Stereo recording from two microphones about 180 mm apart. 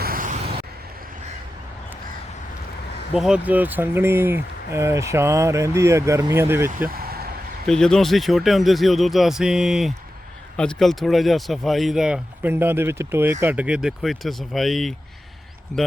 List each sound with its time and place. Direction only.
0.0 s vehicle: 50° right (ahead or behind)
3.2 s speech: 5° right (ahead or behind)
6.9 s vehicle: 60° right (ahead or behind)
7.7 s speech: 5° left (ahead or behind)